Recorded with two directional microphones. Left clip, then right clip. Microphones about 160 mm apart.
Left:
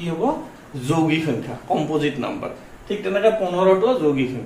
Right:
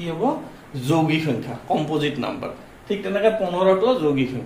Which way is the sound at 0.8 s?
15° right (ahead or behind).